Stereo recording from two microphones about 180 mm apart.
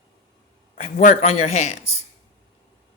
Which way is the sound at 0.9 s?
40° left (ahead or behind).